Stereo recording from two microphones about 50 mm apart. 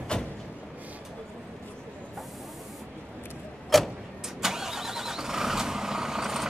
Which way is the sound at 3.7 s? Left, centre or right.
Centre.